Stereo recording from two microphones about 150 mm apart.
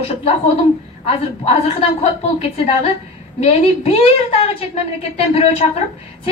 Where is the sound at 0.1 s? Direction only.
45° left (ahead or behind).